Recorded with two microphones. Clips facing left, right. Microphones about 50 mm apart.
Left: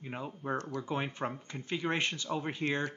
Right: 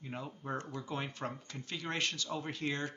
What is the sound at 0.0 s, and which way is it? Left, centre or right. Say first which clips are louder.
Speech: left 4 dB; left.